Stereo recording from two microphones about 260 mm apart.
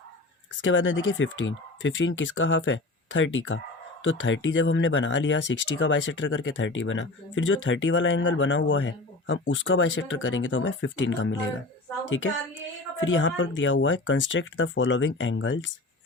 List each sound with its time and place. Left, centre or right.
0.6 s speech: left
13.0 s speech: left